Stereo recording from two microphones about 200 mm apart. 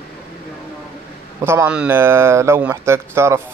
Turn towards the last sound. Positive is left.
turn(degrees=-15)  # may be behind; listen again after turning